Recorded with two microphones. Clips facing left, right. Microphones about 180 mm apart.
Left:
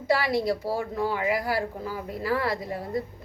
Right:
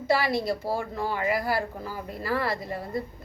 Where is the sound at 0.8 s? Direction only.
5° left (ahead or behind).